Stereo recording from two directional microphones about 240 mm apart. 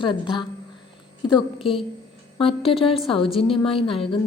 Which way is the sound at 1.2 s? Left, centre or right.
Left.